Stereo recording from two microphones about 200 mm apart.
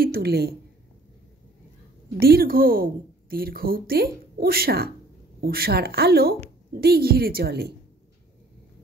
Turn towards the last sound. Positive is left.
turn(degrees=-50)  # may be behind; listen again after turning